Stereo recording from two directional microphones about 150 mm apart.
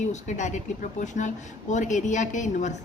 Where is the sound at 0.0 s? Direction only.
50° left (ahead or behind).